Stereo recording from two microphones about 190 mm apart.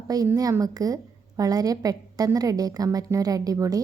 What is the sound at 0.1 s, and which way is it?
A woman's voice, 20° right (ahead or behind).